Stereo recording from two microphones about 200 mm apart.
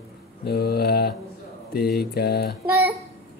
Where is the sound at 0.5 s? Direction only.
50° left (ahead or behind).